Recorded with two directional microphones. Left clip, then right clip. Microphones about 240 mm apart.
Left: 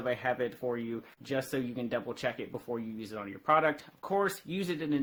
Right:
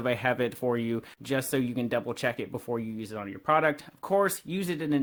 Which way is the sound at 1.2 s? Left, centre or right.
Right.